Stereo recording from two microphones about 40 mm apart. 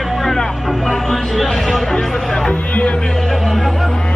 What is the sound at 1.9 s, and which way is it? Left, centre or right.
Music, centre.